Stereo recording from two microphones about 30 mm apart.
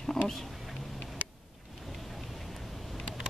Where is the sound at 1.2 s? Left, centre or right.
Right.